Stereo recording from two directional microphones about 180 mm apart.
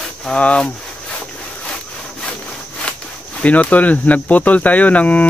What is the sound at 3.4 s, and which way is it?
Cricket, 10° left (ahead or behind).